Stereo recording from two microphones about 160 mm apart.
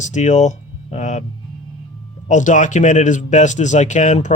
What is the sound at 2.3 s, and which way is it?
Speech, 50° left (ahead or behind).